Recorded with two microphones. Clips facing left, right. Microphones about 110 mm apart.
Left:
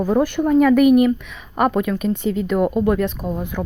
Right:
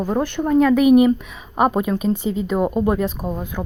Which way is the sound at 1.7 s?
25° right (ahead or behind).